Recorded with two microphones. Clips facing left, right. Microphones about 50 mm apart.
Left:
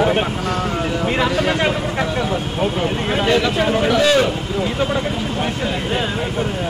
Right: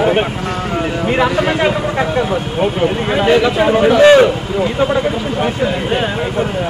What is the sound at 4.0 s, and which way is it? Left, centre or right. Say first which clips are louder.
Speech: right 8 dB; right.